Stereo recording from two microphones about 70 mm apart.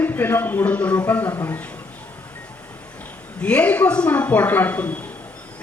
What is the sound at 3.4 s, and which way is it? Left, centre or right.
A man's voice, centre.